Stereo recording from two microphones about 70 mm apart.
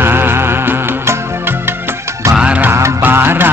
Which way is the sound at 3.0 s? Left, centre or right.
Right.